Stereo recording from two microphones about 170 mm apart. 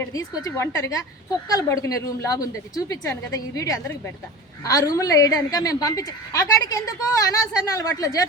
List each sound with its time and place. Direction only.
0.0 s a woman's voice: 20° left (ahead or behind)